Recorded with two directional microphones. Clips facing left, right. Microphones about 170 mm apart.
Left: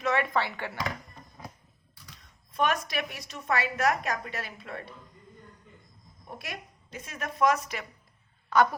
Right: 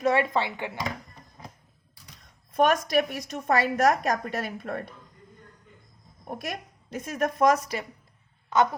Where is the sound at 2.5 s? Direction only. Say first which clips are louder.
Right 6 dB; 45° right (ahead or behind).